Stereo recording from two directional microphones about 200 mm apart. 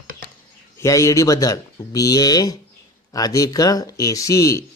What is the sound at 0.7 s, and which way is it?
Speech, 15° left (ahead or behind).